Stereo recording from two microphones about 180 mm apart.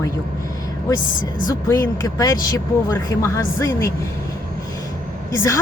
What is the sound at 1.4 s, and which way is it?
Speech, 20° left (ahead or behind).